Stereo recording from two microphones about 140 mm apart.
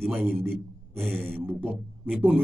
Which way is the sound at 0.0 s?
15° right (ahead or behind).